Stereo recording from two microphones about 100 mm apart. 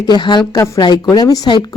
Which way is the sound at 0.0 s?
50° left (ahead or behind).